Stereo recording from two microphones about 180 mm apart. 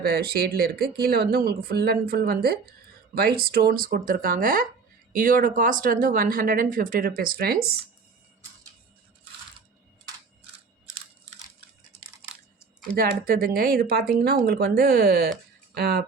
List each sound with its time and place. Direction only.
0.0 s speech: 60° right (ahead or behind)
13.0 s speech: 55° right (ahead or behind)